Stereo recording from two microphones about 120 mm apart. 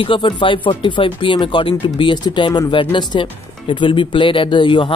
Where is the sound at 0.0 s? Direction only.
45° left (ahead or behind).